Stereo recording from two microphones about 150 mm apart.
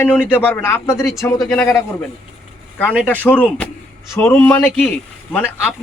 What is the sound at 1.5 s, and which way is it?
Speech, 5° left (ahead or behind).